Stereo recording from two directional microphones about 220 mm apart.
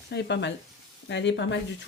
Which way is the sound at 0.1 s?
50° left (ahead or behind).